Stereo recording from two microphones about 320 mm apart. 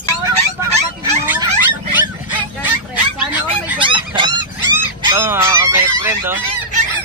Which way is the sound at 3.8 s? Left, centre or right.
Centre.